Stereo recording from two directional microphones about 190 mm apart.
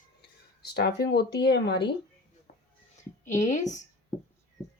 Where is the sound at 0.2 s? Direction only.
60° left (ahead or behind).